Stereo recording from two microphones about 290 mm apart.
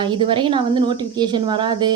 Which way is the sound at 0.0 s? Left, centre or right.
Centre.